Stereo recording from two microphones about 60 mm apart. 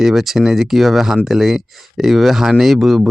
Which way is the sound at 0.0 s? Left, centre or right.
Centre.